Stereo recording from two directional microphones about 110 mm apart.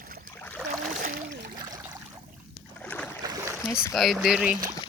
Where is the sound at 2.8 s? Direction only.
15° left (ahead or behind).